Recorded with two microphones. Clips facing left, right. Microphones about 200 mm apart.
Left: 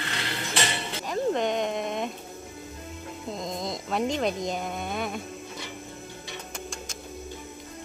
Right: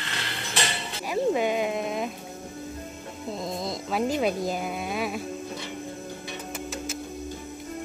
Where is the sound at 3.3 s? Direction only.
5° right (ahead or behind).